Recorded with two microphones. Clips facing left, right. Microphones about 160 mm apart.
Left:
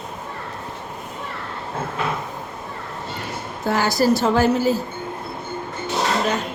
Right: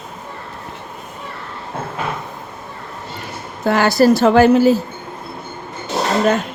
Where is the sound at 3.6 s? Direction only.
70° right (ahead or behind).